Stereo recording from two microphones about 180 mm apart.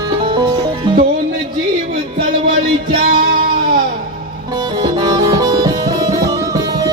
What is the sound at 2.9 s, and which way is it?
Music, 50° right (ahead or behind).